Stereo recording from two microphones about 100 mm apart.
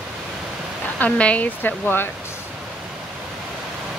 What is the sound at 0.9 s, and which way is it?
Speech, 15° left (ahead or behind).